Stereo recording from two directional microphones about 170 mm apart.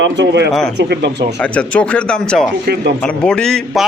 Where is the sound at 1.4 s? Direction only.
5° left (ahead or behind).